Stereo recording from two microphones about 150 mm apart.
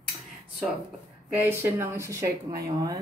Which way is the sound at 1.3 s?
15° right (ahead or behind).